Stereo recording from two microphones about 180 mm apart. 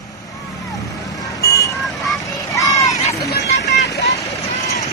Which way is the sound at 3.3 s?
70° left (ahead or behind).